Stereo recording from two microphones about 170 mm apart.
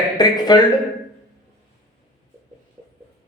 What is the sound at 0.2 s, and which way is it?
Speech, 25° left (ahead or behind).